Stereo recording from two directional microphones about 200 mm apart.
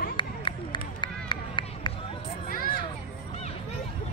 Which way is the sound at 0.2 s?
25° left (ahead or behind).